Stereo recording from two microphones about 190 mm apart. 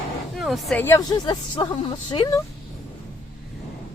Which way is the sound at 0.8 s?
15° left (ahead or behind).